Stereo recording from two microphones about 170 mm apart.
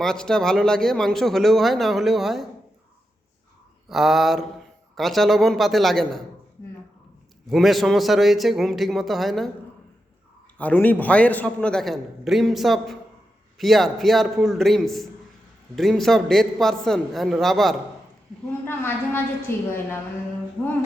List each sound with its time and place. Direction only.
0.0 s speech: 5° left (ahead or behind)
3.8 s speech: centre (ahead or behind)
7.5 s speech: centre (ahead or behind)
10.6 s speech: 10° left (ahead or behind)
18.6 s a woman's voice: 10° left (ahead or behind)